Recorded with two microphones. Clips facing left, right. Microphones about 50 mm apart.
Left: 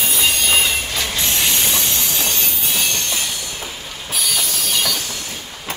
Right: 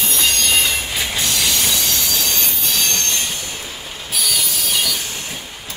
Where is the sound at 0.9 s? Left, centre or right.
Centre.